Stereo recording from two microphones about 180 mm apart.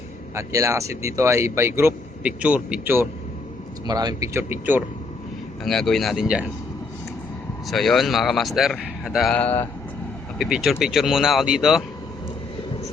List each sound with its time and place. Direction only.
0.3 s speech: 15° right (ahead or behind)
3.8 s speech: 20° right (ahead or behind)
5.6 s a man's voice: centre (ahead or behind)
7.7 s a man's voice: centre (ahead or behind)